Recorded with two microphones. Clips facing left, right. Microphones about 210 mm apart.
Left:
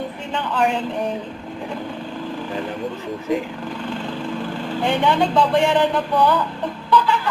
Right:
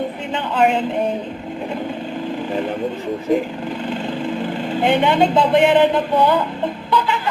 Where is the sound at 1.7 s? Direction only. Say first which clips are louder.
Right 4 dB; 20° right (ahead or behind).